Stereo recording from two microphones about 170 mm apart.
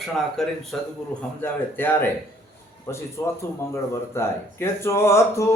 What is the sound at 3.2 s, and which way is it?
A man's voice, 20° left (ahead or behind).